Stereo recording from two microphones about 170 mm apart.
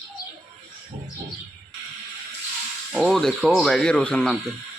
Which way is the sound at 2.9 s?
Centre (ahead or behind).